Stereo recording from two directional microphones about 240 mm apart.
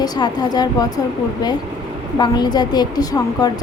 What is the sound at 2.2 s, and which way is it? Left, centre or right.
A woman's voice, centre.